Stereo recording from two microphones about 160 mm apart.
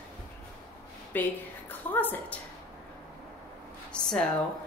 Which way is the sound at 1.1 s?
10° left (ahead or behind).